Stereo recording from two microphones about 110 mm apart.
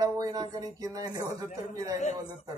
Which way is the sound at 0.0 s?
35° right (ahead or behind).